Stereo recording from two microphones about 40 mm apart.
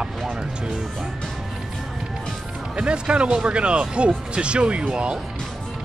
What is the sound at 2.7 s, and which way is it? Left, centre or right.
Speech, right.